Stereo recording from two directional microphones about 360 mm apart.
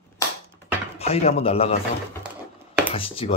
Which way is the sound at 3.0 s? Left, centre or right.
Centre.